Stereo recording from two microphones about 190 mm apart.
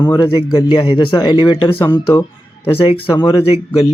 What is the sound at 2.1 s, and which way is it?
Music, 10° left (ahead or behind).